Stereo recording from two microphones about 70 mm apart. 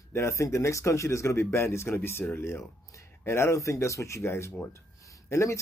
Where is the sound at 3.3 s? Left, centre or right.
Left.